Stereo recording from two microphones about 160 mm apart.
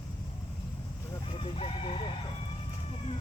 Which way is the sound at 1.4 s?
35° left (ahead or behind).